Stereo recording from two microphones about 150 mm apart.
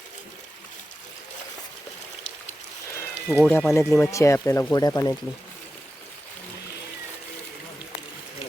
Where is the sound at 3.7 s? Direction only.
15° left (ahead or behind).